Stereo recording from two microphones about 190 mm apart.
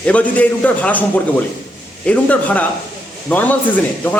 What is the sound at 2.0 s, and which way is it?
Speech, 5° left (ahead or behind).